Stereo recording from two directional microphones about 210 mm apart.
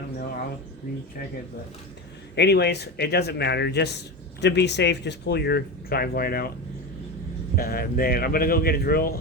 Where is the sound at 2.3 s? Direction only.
50° left (ahead or behind).